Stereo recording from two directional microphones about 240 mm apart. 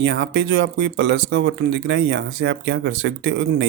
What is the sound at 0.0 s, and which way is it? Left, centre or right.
Speech, right.